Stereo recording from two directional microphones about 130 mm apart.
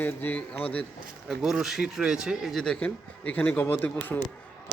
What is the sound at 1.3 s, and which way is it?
Speech, 5° right (ahead or behind).